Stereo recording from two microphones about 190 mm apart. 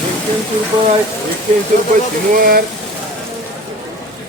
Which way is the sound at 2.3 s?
50° right (ahead or behind).